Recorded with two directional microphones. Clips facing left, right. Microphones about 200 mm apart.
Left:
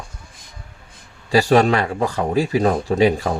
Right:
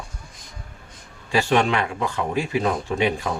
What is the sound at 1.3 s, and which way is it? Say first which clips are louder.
Speech: left 5 dB; 35° left (ahead or behind).